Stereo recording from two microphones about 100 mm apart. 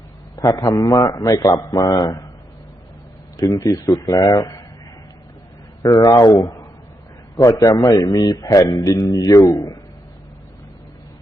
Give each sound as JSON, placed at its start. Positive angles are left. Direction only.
{"t": 0.3, "sound": "a man's voice", "side_deg": 35}
{"t": 3.3, "sound": "a man's voice", "side_deg": 35}
{"t": 5.8, "sound": "a man's voice", "side_deg": 40}